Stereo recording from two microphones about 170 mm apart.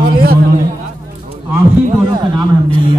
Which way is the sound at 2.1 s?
25° right (ahead or behind).